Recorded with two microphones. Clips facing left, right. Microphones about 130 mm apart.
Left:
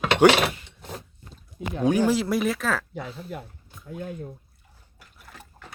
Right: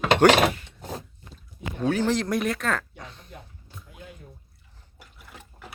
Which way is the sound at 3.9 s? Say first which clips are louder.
Left 12 dB; 45° left (ahead or behind).